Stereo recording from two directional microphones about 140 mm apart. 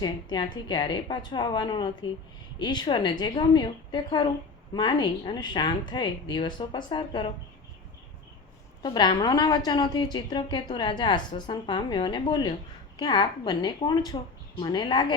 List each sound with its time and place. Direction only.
0.0 s a woman's voice: 30° left (ahead or behind)
8.8 s a woman's voice: 30° left (ahead or behind)